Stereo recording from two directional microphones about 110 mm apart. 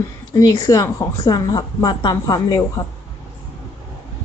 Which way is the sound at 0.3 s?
30° left (ahead or behind).